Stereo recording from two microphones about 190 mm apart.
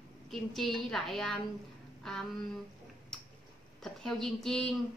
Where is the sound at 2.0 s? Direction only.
Centre (ahead or behind).